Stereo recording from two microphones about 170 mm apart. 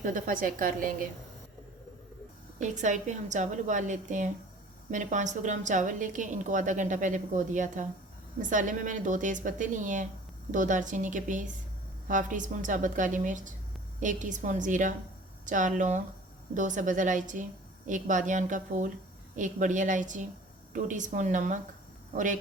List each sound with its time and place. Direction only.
0.0 s a woman's voice: 50° right (ahead or behind)
2.6 s a woman's voice: 45° right (ahead or behind)